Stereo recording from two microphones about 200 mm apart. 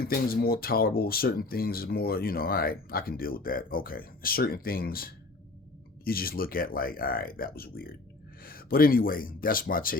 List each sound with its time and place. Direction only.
0.0 s speech: 50° left (ahead or behind)